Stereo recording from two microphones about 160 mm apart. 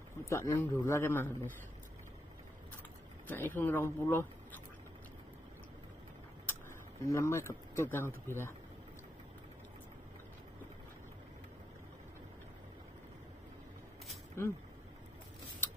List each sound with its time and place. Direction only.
0.3 s a man's voice: 15° left (ahead or behind)
3.3 s speech: 10° left (ahead or behind)
7.0 s a man's voice: 20° left (ahead or behind)
14.4 s a man's voice: 15° left (ahead or behind)